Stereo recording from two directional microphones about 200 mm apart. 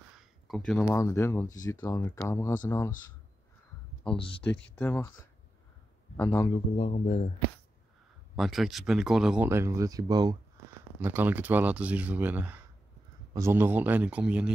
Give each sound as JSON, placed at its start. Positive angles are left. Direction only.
{"t": 0.2, "sound": "speech", "side_deg": 0}
{"t": 4.7, "sound": "speech", "side_deg": 5}
{"t": 6.1, "sound": "speech", "side_deg": 15}
{"t": 6.5, "sound": "speech", "side_deg": 30}
{"t": 8.4, "sound": "speech", "side_deg": 0}